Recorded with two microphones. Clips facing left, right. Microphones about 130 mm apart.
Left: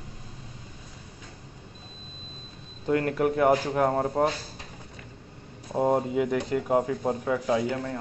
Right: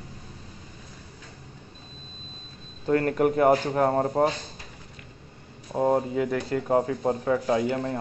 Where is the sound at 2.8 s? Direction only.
5° left (ahead or behind).